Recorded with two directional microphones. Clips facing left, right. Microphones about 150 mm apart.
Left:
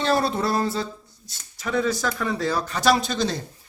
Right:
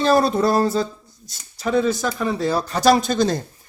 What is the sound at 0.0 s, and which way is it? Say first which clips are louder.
Speech: right 5 dB; 40° right (ahead or behind).